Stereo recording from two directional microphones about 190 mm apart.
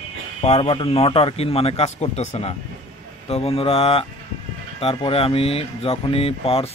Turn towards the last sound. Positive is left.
turn(degrees=30)  # may be behind; listen again after turning